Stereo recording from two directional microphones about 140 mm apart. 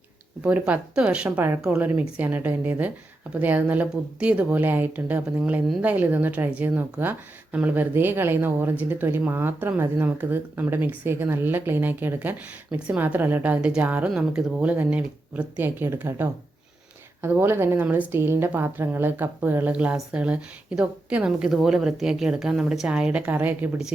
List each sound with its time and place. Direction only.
0.4 s speech: 10° right (ahead or behind)